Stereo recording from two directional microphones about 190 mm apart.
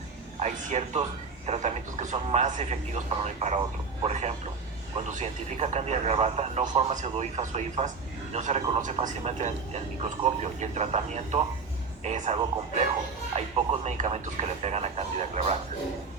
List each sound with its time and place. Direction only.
0.3 s a man's voice: 35° right (ahead or behind)